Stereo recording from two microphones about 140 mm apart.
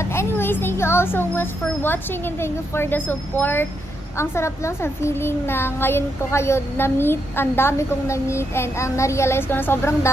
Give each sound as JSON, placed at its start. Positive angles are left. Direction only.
{"t": 0.0, "sound": "a child's voice", "side_deg": 20}